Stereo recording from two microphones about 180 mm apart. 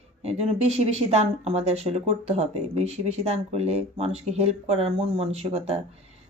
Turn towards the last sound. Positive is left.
turn(degrees=-35)  # may be behind; listen again after turning